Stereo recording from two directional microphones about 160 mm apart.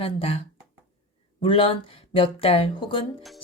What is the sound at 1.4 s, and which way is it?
Speech, 35° left (ahead or behind).